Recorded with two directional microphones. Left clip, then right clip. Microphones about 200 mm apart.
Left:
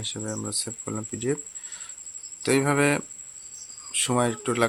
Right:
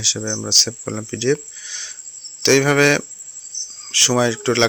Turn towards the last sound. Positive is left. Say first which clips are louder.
# right 7 dB
turn(degrees=-20)  # may be behind; listen again after turning